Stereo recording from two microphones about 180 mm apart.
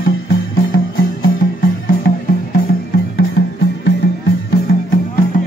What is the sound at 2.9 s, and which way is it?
Music, 65° left (ahead or behind).